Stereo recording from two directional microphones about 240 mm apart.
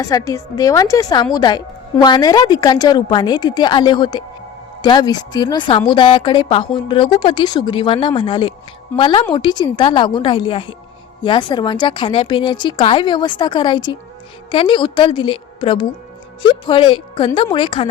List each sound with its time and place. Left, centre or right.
0.0 s a woman's voice: centre